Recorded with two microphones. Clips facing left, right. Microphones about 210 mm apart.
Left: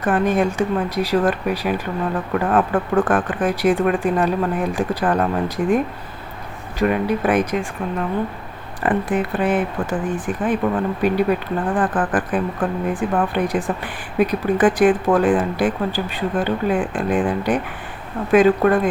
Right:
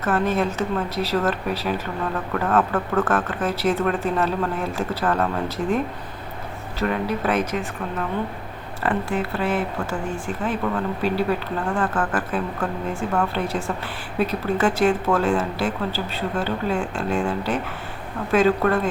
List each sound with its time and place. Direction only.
0.0 s speech: 15° left (ahead or behind)
8.8 s speech: 20° left (ahead or behind)